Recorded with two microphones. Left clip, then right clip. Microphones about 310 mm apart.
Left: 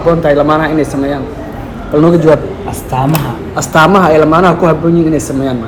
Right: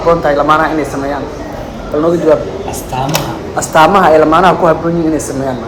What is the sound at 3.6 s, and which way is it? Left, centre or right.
A man's voice, left.